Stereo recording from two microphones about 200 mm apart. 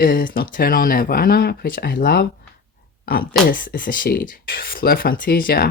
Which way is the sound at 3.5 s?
45° left (ahead or behind).